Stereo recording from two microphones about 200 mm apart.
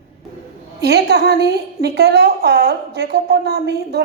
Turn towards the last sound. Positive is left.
turn(degrees=-55)  # may be behind; listen again after turning